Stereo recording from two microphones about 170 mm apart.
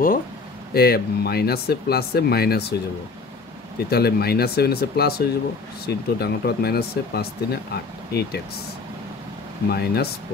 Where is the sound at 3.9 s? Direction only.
70° left (ahead or behind).